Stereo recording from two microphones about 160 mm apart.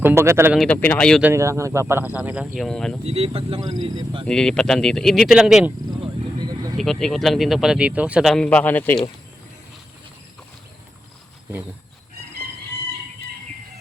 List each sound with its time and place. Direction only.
0.0 s speech: 15° right (ahead or behind)
0.7 s speech: 10° left (ahead or behind)
1.2 s speech: 15° right (ahead or behind)
2.6 s speech: 5° left (ahead or behind)
3.0 s speech: 40° right (ahead or behind)
4.3 s speech: 5° left (ahead or behind)
6.0 s a sound: 25° right (ahead or behind)
6.7 s speech: centre (ahead or behind)